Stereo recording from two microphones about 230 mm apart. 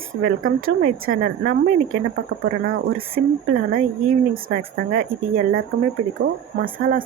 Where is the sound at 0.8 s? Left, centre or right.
Right.